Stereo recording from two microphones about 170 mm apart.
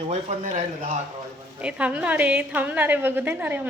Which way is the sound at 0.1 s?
40° right (ahead or behind).